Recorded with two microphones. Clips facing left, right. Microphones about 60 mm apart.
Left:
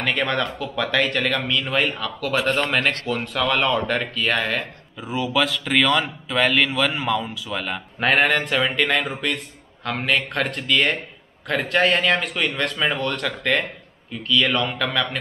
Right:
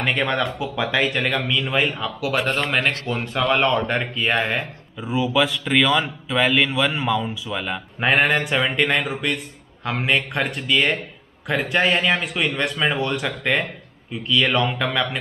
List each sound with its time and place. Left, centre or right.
0.0 s a man's voice: centre
4.9 s a man's voice: centre
14.1 s speech: centre
14.5 s speech: centre